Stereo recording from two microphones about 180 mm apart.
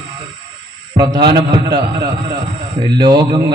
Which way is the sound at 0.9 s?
20° right (ahead or behind).